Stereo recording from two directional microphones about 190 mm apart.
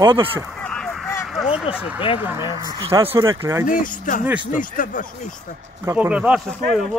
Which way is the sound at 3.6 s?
45° left (ahead or behind).